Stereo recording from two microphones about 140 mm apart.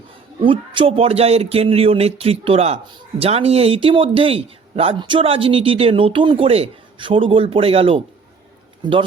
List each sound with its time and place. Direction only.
0.3 s a man's voice: 40° right (ahead or behind)